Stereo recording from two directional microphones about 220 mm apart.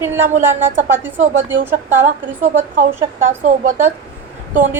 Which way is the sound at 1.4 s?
10° right (ahead or behind).